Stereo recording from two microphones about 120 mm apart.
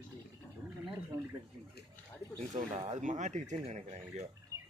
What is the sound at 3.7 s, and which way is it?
Speech, 65° right (ahead or behind).